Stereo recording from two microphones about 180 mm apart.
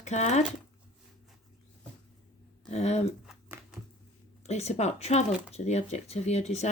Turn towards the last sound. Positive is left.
turn(degrees=40)  # may be behind; listen again after turning